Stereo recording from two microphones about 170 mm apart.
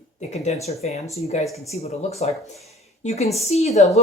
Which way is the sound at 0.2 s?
40° left (ahead or behind).